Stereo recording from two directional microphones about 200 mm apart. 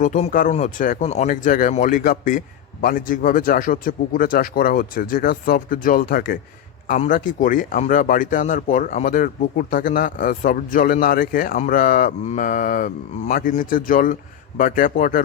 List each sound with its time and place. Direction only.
0.0 s speech: 40° left (ahead or behind)